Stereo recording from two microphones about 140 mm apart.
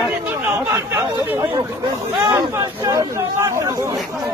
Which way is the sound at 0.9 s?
20° right (ahead or behind).